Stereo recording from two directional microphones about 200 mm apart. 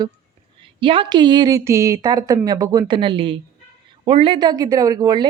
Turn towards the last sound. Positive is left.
turn(degrees=-20)  # may be behind; listen again after turning